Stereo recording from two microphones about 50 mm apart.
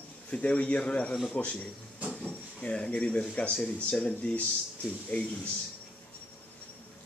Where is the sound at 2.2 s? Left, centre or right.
Left.